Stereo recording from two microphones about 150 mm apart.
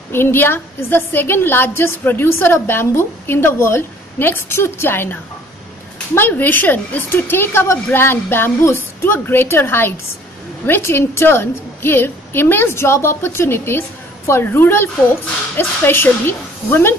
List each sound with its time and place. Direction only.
0.1 s a woman's voice: 15° left (ahead or behind)